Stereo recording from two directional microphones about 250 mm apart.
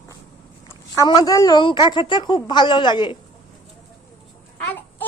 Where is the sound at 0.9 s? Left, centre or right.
Centre.